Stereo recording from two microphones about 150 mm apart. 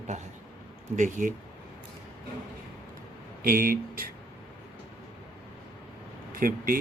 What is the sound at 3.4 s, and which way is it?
Speech, 70° right (ahead or behind).